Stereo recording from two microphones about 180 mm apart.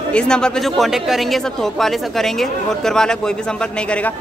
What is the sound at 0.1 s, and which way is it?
A man's voice, 5° left (ahead or behind).